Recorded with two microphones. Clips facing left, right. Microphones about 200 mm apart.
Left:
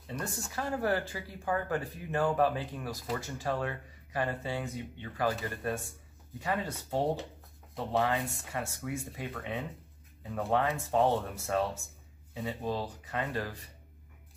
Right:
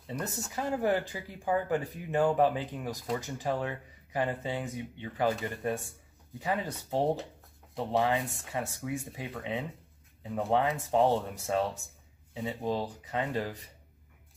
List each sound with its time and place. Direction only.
0.0 s speech: 20° right (ahead or behind)
8.2 s speech: centre (ahead or behind)
8.5 s speech: 15° right (ahead or behind)